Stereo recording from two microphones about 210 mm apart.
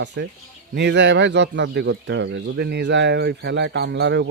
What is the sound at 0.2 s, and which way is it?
A man's voice, 55° right (ahead or behind).